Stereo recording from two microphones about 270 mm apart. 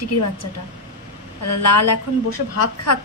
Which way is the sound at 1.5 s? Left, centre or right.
Left.